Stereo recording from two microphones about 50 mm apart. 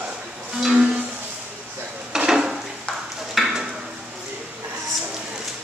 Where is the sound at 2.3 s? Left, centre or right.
Centre.